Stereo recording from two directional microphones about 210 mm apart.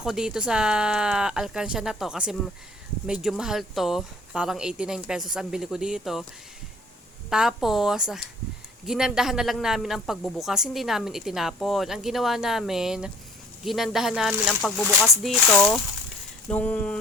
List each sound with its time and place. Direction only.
0.0 s speech: 5° right (ahead or behind)
7.3 s speech: 5° right (ahead or behind)